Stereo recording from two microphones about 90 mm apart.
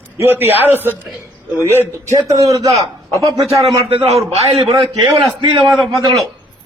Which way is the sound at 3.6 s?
90° right.